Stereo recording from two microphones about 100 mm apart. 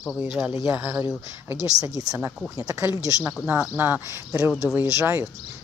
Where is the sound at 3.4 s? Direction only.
20° right (ahead or behind).